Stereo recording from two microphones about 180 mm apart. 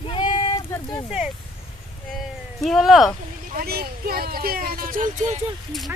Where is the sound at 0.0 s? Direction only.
30° left (ahead or behind).